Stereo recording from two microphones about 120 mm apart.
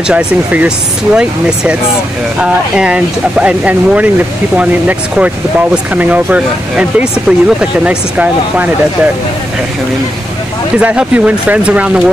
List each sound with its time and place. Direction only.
0.1 s speech: 10° right (ahead or behind)
10.8 s speech: 10° right (ahead or behind)